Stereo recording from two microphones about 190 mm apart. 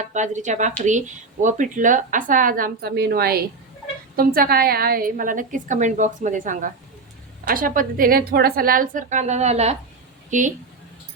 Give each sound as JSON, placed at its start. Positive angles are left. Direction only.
{"t": 0.0, "sound": "a woman's voice", "side_deg": -40}